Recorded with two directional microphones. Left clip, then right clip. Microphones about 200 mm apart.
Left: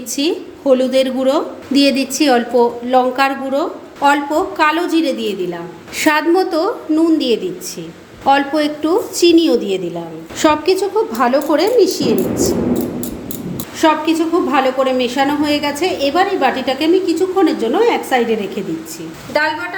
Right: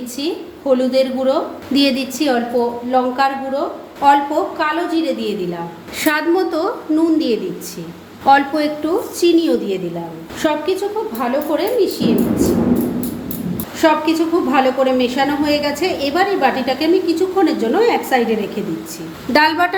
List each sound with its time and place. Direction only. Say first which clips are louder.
0.2 s a woman's voice: left 5 dB; 30° left (ahead or behind)
10.4 s a woman's voice: left 4 dB; 35° left (ahead or behind)
13.8 s a woman's voice: left 1 dB; 15° left (ahead or behind)